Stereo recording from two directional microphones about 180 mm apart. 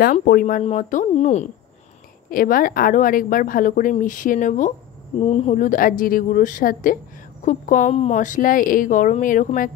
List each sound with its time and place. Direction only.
0.0 s a woman's voice: 50° left (ahead or behind)
2.2 s a woman's voice: 50° left (ahead or behind)